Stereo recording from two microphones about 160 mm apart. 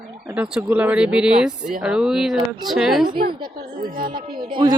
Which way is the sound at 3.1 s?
70° right (ahead or behind).